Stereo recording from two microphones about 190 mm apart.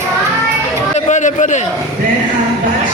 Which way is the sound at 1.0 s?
40° left (ahead or behind).